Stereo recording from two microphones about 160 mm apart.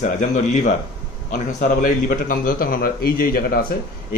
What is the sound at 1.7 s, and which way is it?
A man's voice, 60° left (ahead or behind).